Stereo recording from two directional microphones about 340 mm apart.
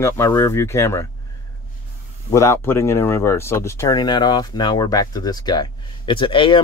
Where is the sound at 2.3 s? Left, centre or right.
Centre.